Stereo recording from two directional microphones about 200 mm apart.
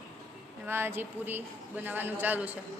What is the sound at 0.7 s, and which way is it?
A woman's voice, 10° right (ahead or behind).